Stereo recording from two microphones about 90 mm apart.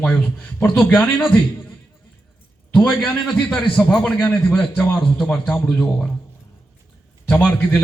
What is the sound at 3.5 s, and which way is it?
Speech, 5° left (ahead or behind).